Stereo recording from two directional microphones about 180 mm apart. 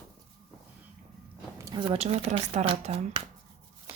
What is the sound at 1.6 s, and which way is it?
Speech, 25° right (ahead or behind).